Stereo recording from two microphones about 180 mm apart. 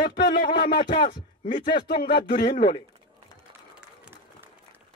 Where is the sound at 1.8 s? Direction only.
60° left (ahead or behind).